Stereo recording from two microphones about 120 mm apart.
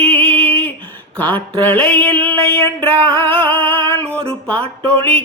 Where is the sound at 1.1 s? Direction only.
15° left (ahead or behind).